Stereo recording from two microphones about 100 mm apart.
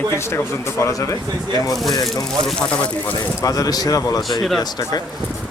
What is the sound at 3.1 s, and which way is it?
Speech, 40° left (ahead or behind).